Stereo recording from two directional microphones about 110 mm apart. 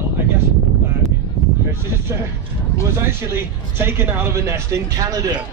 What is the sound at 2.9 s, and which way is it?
A man's voice, 20° right (ahead or behind).